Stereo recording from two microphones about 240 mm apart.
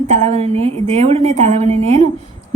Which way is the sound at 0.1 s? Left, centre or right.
Right.